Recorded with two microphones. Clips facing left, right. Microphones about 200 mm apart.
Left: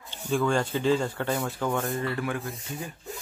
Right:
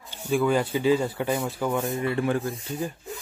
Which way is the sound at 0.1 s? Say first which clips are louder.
Right 2 dB; 10° right (ahead or behind).